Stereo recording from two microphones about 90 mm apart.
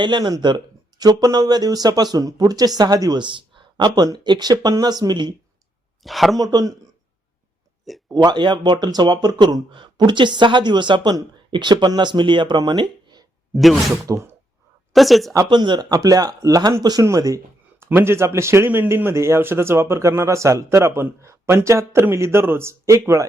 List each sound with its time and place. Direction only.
0.0 s speech: 55° right (ahead or behind)
6.0 s speech: centre (ahead or behind)
6.4 s speech: 45° right (ahead or behind)
8.1 s speech: 55° right (ahead or behind)
13.5 s speech: centre (ahead or behind)
13.9 s speech: 35° right (ahead or behind)
14.9 s speech: centre (ahead or behind)
15.4 s speech: 60° right (ahead or behind); by 23.2 s 35° right (ahead or behind)